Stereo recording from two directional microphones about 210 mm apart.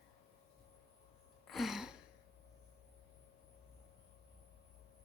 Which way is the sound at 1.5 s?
Centre (ahead or behind).